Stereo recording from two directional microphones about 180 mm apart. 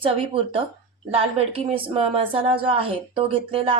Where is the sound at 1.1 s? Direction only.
30° right (ahead or behind).